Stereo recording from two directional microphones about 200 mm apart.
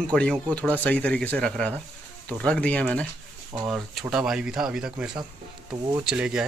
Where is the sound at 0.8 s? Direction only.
5° left (ahead or behind).